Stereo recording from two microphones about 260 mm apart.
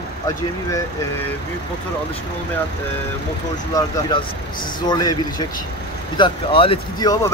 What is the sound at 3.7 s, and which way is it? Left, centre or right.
A man's voice, centre.